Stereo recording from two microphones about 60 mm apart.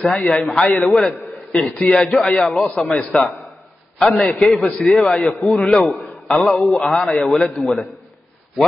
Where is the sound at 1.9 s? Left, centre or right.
Centre.